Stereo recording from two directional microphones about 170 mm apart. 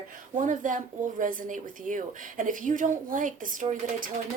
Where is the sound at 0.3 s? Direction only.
50° right (ahead or behind).